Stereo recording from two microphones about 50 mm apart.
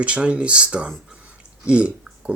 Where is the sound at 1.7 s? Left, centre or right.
Right.